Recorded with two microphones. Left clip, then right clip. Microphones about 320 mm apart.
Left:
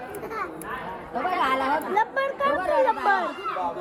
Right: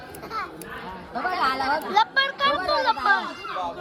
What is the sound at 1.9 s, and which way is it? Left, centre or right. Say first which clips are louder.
Speech: right 3 dB; centre.